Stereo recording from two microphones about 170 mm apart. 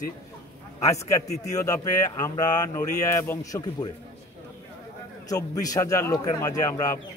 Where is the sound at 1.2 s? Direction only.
40° left (ahead or behind).